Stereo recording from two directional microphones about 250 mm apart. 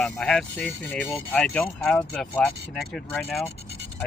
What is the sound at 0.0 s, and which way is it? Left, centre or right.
Speech, centre.